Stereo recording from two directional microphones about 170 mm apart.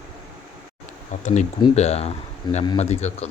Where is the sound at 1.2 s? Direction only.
45° left (ahead or behind).